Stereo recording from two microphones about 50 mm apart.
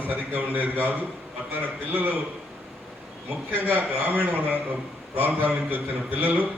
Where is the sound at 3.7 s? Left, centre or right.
Right.